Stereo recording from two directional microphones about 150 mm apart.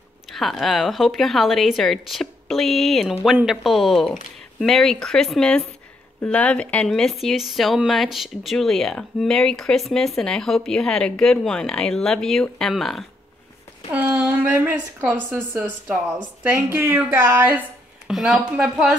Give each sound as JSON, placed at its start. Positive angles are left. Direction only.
{"t": 0.3, "sound": "speech", "side_deg": 0}
{"t": 13.9, "sound": "a woman's voice", "side_deg": -10}